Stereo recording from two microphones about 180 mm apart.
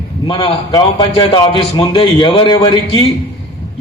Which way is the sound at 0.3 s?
30° left (ahead or behind).